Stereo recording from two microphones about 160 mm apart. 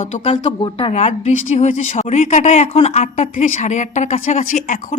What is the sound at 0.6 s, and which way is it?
A woman's voice, 35° left (ahead or behind).